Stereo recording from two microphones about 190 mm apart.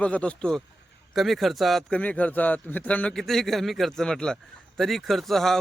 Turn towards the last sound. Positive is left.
turn(degrees=0)  # may be behind; listen again after turning